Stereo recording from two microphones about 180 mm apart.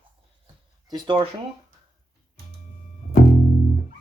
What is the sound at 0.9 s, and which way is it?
Speech, 25° right (ahead or behind).